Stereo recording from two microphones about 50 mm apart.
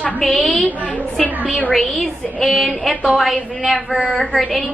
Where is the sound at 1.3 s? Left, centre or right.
Right.